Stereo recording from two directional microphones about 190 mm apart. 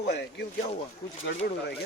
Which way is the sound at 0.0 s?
60° left (ahead or behind).